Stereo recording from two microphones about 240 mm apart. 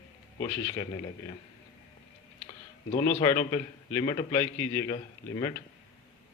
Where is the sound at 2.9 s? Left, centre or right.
Centre.